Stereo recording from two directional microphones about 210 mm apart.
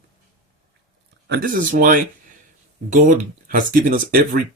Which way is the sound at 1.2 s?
45° right (ahead or behind).